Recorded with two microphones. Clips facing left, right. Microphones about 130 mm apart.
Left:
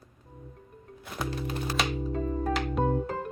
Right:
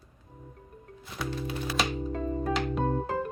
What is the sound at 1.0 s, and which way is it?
Music, 45° left (ahead or behind).